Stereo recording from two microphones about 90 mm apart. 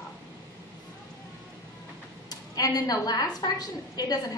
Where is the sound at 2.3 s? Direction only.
45° left (ahead or behind).